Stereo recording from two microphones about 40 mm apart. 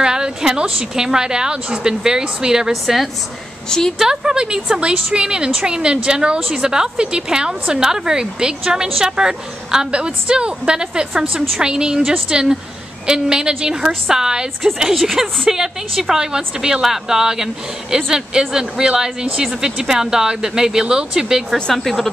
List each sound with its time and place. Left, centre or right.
0.0 s a woman's voice: centre
2.7 s speech: centre
4.0 s a woman's voice: centre
21.7 s speech: centre